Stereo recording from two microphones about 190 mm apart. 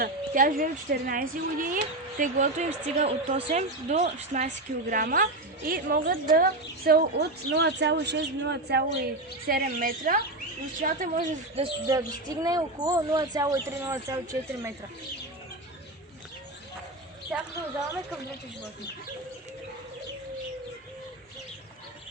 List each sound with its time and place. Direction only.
0.0 s a woman's voice: 45° right (ahead or behind)
9.5 s a woman's voice: 45° right (ahead or behind)
11.9 s speech: 20° right (ahead or behind)
17.3 s speech: 5° right (ahead or behind)